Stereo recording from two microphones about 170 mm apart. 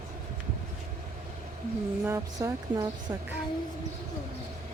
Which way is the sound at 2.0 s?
20° right (ahead or behind).